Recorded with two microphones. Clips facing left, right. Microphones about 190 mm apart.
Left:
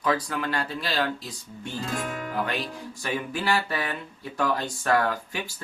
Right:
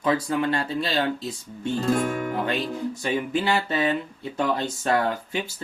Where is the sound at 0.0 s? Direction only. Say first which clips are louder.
Right 4 dB; 25° right (ahead or behind).